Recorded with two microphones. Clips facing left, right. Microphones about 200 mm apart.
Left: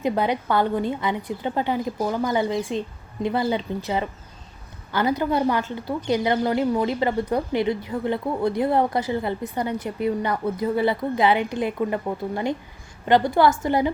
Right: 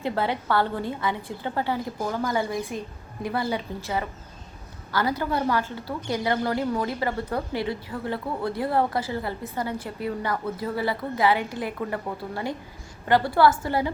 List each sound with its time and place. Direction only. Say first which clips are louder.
0.0 s a woman's voice: left 4 dB; 15° left (ahead or behind)